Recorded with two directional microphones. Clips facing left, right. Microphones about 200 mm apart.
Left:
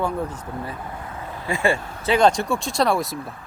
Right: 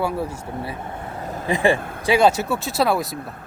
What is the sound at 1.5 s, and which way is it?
Speech, 15° right (ahead or behind).